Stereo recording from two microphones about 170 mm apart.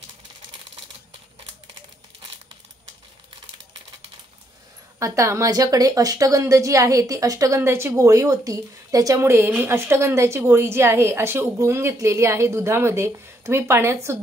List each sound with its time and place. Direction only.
4.9 s a woman's voice: 15° right (ahead or behind)